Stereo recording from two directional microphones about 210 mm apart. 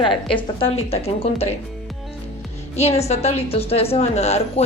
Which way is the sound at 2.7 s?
30° left (ahead or behind).